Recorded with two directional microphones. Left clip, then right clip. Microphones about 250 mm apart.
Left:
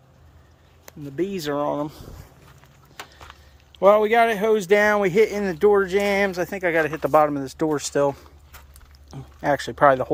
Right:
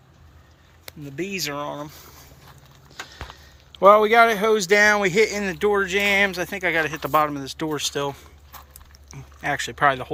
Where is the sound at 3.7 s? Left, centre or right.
Centre.